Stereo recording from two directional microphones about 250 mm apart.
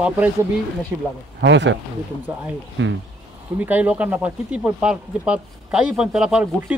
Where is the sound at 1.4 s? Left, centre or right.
Right.